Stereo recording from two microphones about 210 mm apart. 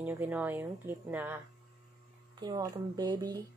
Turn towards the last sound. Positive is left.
turn(degrees=-20)  # may be behind; listen again after turning